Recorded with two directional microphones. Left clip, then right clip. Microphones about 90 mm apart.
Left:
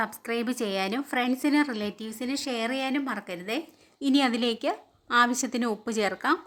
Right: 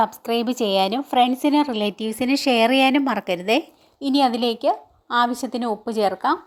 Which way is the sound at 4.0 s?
20° right (ahead or behind).